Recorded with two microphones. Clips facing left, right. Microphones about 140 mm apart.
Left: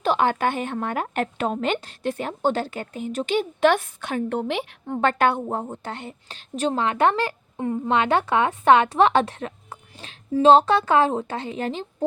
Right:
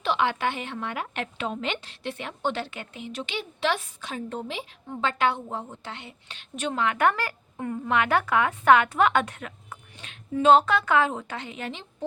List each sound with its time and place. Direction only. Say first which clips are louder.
0.0 s speech: left 4 dB; 45° left (ahead or behind)